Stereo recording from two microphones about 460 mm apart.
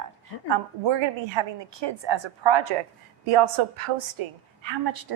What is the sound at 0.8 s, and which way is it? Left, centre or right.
A woman's voice, right.